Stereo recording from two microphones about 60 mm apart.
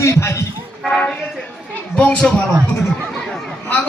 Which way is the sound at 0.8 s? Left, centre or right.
Centre.